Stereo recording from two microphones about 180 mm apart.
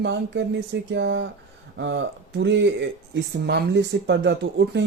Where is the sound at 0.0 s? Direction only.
80° right.